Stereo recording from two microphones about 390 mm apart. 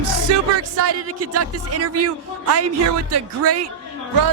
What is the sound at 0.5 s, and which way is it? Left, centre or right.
A man's voice, right.